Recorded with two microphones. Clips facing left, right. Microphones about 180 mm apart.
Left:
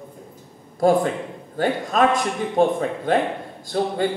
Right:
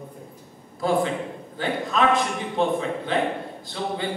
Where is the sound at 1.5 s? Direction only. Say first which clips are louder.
Left 4 dB; 45° left (ahead or behind).